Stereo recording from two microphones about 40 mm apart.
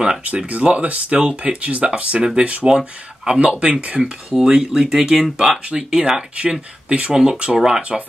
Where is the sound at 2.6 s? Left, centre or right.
Centre.